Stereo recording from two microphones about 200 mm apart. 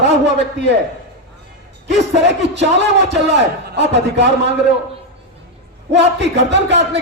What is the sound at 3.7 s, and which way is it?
Speech, 60° right (ahead or behind).